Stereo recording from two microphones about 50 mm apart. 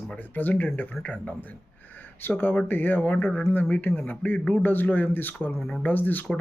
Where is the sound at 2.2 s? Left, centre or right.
Left.